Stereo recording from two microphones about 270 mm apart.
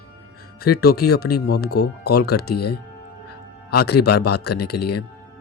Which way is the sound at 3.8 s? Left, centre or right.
Left.